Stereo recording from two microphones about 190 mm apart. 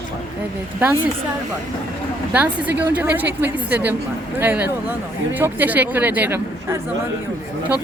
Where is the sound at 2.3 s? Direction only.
5° right (ahead or behind).